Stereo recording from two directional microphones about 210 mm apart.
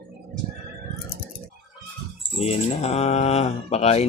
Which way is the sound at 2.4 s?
30° left (ahead or behind).